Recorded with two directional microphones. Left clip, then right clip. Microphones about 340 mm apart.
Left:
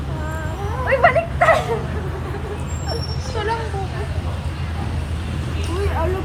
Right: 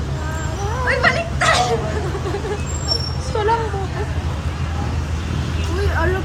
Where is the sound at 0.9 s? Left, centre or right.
Centre.